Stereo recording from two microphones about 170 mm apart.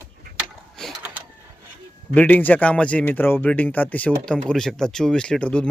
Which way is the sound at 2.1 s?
10° left (ahead or behind).